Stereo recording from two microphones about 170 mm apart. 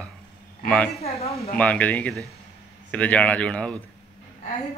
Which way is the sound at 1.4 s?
10° left (ahead or behind).